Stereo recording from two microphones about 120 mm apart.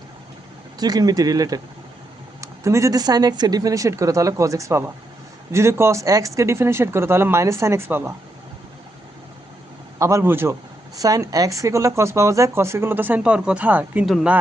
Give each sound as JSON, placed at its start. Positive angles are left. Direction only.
{"t": 0.8, "sound": "speech", "side_deg": -35}
{"t": 10.0, "sound": "speech", "side_deg": -25}